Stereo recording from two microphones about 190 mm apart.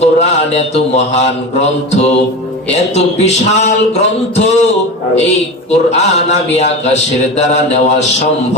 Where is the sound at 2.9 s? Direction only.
35° left (ahead or behind).